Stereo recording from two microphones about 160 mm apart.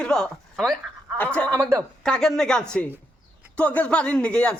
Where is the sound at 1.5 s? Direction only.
15° right (ahead or behind).